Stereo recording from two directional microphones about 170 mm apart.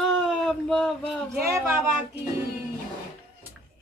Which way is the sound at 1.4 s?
15° right (ahead or behind).